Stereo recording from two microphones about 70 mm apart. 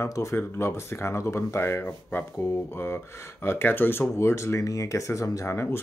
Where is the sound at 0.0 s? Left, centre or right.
Left.